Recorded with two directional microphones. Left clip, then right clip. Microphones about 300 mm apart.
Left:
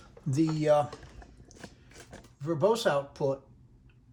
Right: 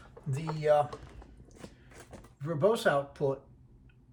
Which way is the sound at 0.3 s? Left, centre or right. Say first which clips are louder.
Left 2 dB; left.